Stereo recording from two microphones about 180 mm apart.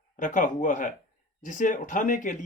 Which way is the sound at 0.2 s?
45° left (ahead or behind).